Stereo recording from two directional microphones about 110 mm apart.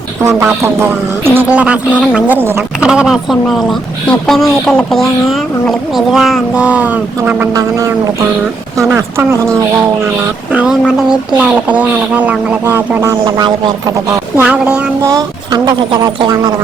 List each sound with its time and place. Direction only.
0.2 s speech: 25° right (ahead or behind)
0.4 s music: 20° right (ahead or behind)
2.8 s speech: 10° right (ahead or behind)
7.5 s a sound: 30° right (ahead or behind)
10.2 s music: 10° right (ahead or behind)
13.2 s speech: 40° right (ahead or behind)
14.4 s music: 10° right (ahead or behind)
15.0 s speech: 35° right (ahead or behind)